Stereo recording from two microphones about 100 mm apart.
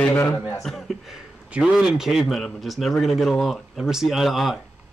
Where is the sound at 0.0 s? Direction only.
15° left (ahead or behind).